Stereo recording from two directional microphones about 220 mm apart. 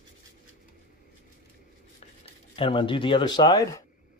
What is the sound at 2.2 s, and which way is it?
Speech, 25° left (ahead or behind).